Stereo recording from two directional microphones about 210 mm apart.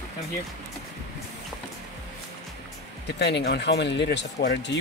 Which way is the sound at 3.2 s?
55° left (ahead or behind).